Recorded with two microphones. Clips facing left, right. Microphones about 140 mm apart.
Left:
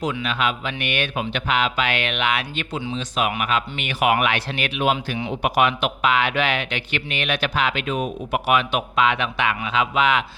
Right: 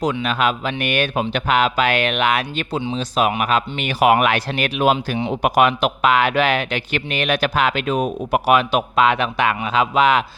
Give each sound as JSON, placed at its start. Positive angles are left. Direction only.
{"t": 0.0, "sound": "speech", "side_deg": -40}